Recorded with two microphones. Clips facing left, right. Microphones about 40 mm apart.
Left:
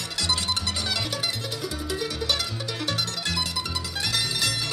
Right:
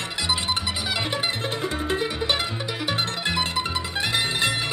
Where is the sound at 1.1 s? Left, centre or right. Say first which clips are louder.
Right 4 dB; right.